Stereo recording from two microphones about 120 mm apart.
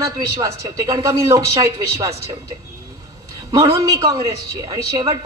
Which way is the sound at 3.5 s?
30° right (ahead or behind).